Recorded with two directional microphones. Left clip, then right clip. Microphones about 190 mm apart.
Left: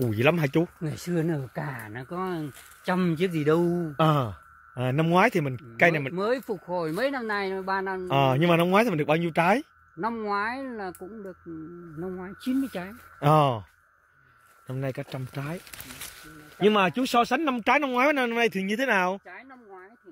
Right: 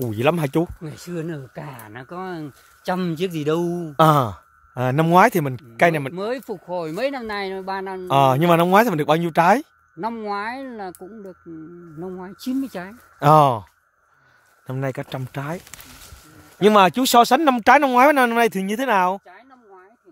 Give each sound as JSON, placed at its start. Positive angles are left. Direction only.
{"t": 0.0, "sound": "speech", "side_deg": -15}
{"t": 0.8, "sound": "speech", "side_deg": 50}
{"t": 2.1, "sound": "speech", "side_deg": -45}
{"t": 2.8, "sound": "a man's voice", "side_deg": -70}
{"t": 3.9, "sound": "speech", "side_deg": -40}
{"t": 6.1, "sound": "speech", "side_deg": -60}
{"t": 8.1, "sound": "speech", "side_deg": -30}
{"t": 9.9, "sound": "a man's voice", "side_deg": -65}
{"t": 13.2, "sound": "speech", "side_deg": -30}
{"t": 14.7, "sound": "speech", "side_deg": -35}
{"t": 16.5, "sound": "speech", "side_deg": -45}